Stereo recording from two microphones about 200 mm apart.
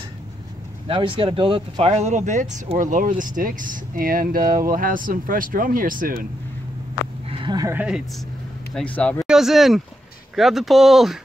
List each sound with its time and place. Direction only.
0.8 s speech: 25° right (ahead or behind); by 6.1 s 45° right (ahead or behind)
7.2 s a sound: 25° right (ahead or behind); by 8.0 s 10° right (ahead or behind)
8.7 s speech: 5° left (ahead or behind)
9.3 s speech: centre (ahead or behind)